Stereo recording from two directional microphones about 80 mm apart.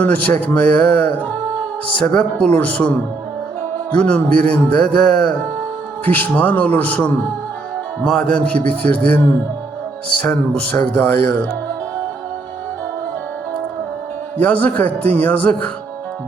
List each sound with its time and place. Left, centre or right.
0.0 s a man's voice: centre
3.9 s a man's voice: centre
14.3 s speech: centre